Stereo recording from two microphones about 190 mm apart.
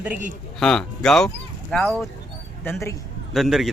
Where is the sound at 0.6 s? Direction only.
5° left (ahead or behind).